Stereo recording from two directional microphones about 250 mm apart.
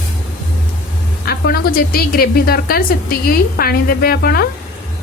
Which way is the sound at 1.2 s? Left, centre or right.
Left.